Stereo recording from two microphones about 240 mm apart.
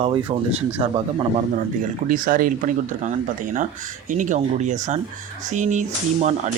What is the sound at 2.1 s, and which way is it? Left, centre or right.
Speech, right.